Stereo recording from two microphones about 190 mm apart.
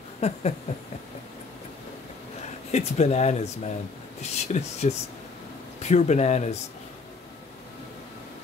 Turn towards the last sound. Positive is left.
turn(degrees=35)  # may be behind; listen again after turning